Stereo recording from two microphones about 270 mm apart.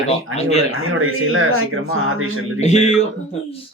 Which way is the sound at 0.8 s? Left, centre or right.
Right.